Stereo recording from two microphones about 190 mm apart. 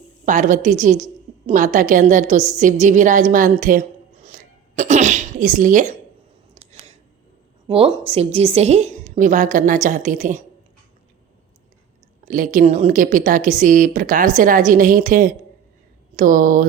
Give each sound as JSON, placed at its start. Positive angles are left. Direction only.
{"t": 0.3, "sound": "a woman's voice", "side_deg": -40}
{"t": 6.5, "sound": "a sound", "side_deg": -35}
{"t": 7.7, "sound": "a woman's voice", "side_deg": -30}
{"t": 12.2, "sound": "a woman's voice", "side_deg": -45}